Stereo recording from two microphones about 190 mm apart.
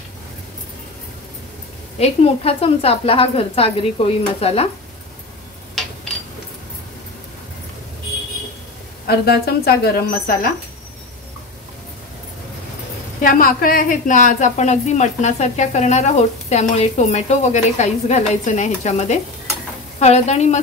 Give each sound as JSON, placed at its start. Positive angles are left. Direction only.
{"t": 2.0, "sound": "a woman's voice", "side_deg": 30}
{"t": 9.0, "sound": "a woman's voice", "side_deg": 55}
{"t": 13.2, "sound": "a woman's voice", "side_deg": 45}